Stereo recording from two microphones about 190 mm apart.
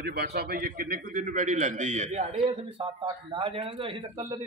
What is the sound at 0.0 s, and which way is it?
A man's voice, 55° right (ahead or behind).